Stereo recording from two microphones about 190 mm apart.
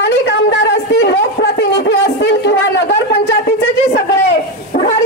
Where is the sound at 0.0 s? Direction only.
65° left (ahead or behind).